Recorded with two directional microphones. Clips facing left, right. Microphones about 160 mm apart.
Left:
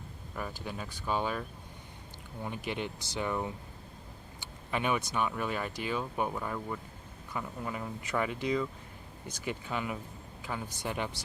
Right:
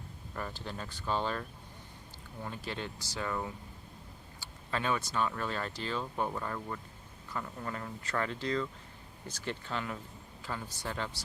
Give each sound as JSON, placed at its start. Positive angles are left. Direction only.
{"t": 0.3, "sound": "speech", "side_deg": 10}